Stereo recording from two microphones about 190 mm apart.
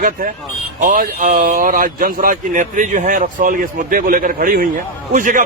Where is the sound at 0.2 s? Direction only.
50° right (ahead or behind).